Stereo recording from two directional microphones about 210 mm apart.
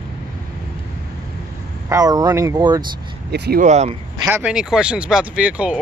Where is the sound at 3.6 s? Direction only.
30° right (ahead or behind).